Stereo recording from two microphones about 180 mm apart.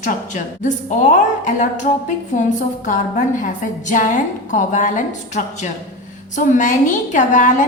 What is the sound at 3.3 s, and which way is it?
A woman's voice, 45° left (ahead or behind).